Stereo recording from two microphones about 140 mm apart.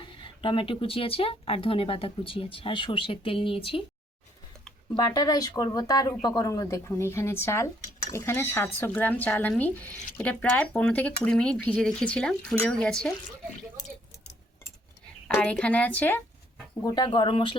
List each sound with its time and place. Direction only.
0.0 s speech: 35° left (ahead or behind)
4.9 s speech: 25° left (ahead or behind); by 13.1 s 5° left (ahead or behind)
15.3 s speech: 10° left (ahead or behind)
16.8 s speech: 30° left (ahead or behind)